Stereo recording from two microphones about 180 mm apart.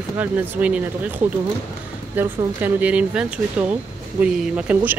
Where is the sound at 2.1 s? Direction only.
10° right (ahead or behind).